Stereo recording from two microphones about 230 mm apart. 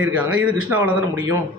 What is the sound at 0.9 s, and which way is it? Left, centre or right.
Speech, right.